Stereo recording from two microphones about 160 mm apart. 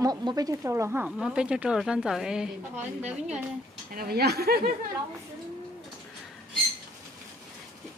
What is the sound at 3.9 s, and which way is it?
Speech, 75° right (ahead or behind).